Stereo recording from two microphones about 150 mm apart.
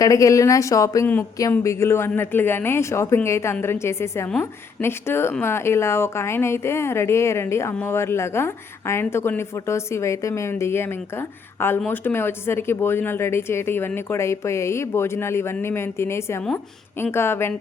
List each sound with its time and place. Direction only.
0.0 s speech: 20° left (ahead or behind)